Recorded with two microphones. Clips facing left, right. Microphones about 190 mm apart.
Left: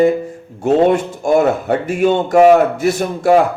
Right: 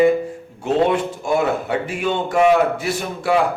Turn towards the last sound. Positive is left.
turn(degrees=45)  # may be behind; listen again after turning